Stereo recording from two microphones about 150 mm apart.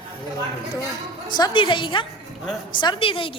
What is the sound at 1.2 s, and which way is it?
A woman's voice, 30° left (ahead or behind).